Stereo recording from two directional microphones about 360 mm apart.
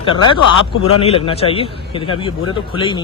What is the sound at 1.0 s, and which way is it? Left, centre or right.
A man's voice, centre.